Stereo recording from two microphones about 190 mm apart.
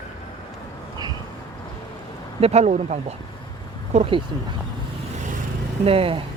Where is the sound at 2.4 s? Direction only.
35° right (ahead or behind).